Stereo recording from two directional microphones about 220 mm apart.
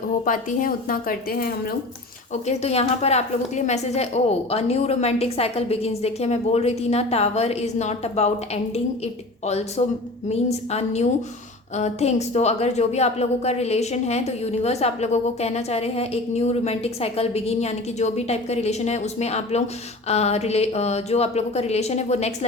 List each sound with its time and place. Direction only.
0.3 s a woman's voice: 40° left (ahead or behind)
2.3 s a woman's voice: 30° left (ahead or behind)
9.5 s a woman's voice: 30° left (ahead or behind)